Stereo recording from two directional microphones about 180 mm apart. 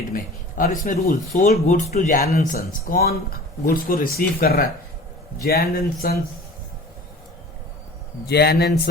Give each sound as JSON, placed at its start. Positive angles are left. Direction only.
{"t": 0.1, "sound": "speech", "side_deg": 50}
{"t": 1.6, "sound": "speech", "side_deg": 40}
{"t": 8.3, "sound": "speech", "side_deg": 60}